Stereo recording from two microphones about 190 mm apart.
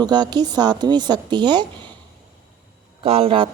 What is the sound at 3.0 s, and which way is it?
Speech, 30° right (ahead or behind).